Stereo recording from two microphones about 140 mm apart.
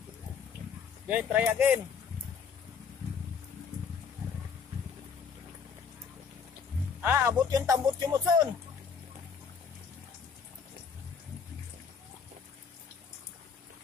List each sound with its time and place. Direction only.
1.0 s speech: 10° right (ahead or behind)
7.0 s speech: 15° right (ahead or behind)